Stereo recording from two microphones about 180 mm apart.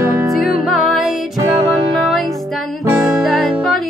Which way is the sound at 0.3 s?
Centre (ahead or behind).